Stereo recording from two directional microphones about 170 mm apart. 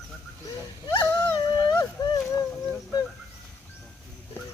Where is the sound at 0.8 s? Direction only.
20° left (ahead or behind).